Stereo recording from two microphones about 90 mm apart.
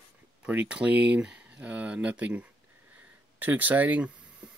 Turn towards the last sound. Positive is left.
turn(degrees=-20)  # may be behind; listen again after turning